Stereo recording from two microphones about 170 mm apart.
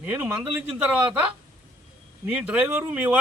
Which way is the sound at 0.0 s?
10° right (ahead or behind).